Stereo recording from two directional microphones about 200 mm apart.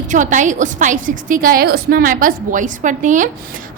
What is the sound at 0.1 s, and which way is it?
A woman's voice, 40° right (ahead or behind).